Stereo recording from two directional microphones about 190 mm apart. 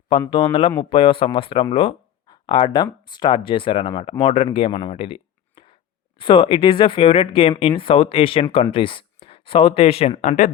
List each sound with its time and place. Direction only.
0.1 s speech: 25° left (ahead or behind)